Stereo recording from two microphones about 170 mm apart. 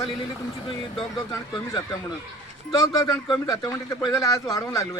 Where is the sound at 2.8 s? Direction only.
20° left (ahead or behind).